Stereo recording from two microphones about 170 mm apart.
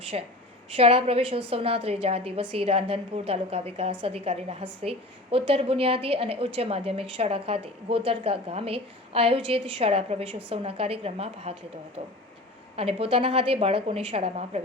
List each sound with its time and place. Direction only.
0.1 s a woman's voice: 40° right (ahead or behind)